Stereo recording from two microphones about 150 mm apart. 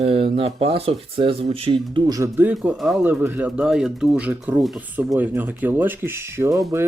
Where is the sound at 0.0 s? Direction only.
40° right (ahead or behind).